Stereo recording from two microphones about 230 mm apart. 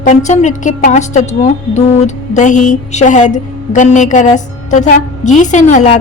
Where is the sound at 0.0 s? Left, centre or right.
Left.